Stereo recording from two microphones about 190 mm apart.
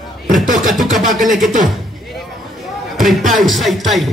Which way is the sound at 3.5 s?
Centre (ahead or behind).